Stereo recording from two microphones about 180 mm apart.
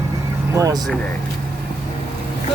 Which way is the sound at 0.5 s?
20° right (ahead or behind).